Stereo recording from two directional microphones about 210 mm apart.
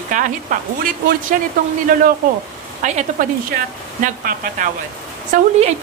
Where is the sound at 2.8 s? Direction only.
35° right (ahead or behind).